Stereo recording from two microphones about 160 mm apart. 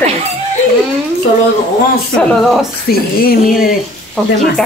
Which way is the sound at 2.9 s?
70° left (ahead or behind).